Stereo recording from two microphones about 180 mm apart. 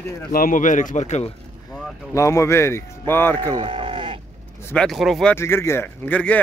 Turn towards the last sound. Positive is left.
turn(degrees=10)  # may be behind; listen again after turning